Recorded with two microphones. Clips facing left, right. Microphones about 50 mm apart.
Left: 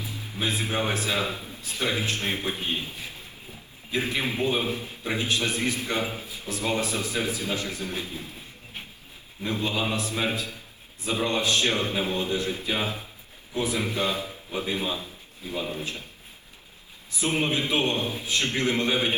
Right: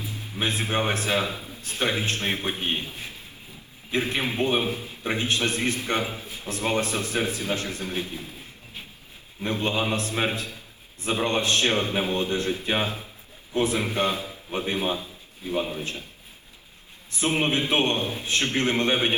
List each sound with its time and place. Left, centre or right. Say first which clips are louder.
0.3 s a man's voice: right 2 dB; right
1.3 s a sound: even; left
1.6 s a man's voice: right 2 dB; right
3.9 s a man's voice: right 2 dB; right
9.4 s a man's voice: right 2 dB; right
17.1 s a man's voice: right 2 dB; right